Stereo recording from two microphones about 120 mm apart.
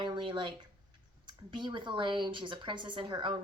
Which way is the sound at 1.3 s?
40° right (ahead or behind).